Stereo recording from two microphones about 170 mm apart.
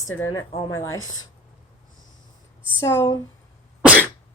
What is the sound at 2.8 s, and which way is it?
Speech, 15° left (ahead or behind).